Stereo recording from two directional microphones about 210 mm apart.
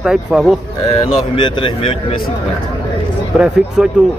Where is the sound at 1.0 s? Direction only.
25° left (ahead or behind).